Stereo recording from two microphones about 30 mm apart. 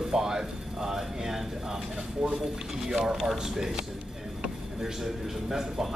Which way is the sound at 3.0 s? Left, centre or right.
Centre.